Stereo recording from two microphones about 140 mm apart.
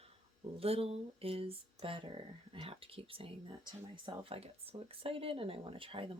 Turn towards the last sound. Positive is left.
turn(degrees=-40)  # may be behind; listen again after turning